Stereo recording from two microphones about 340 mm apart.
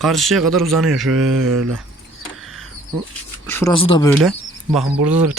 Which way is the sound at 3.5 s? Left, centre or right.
Centre.